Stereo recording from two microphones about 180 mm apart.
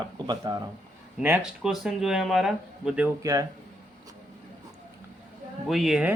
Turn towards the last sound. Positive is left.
turn(degrees=-5)  # may be behind; listen again after turning